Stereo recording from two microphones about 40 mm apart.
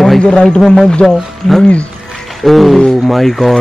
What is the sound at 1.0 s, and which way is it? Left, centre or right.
Speech, centre.